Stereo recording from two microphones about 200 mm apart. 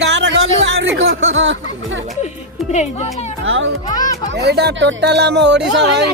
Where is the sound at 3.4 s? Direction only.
75° right (ahead or behind).